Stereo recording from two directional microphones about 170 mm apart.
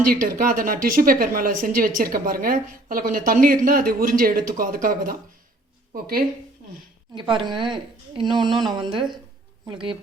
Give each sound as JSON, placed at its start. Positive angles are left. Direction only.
{"t": 0.1, "sound": "speech", "side_deg": -55}
{"t": 7.2, "sound": "speech", "side_deg": -30}
{"t": 8.4, "sound": "speech", "side_deg": 0}
{"t": 8.7, "sound": "speech", "side_deg": -30}